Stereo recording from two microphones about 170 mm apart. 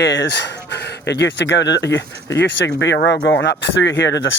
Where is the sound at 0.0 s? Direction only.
90° left.